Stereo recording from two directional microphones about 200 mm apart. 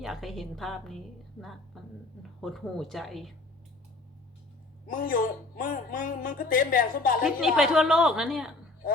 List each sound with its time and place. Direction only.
0.0 s a woman's voice: centre (ahead or behind)
4.9 s a woman's voice: 45° left (ahead or behind)
7.3 s a woman's voice: centre (ahead or behind)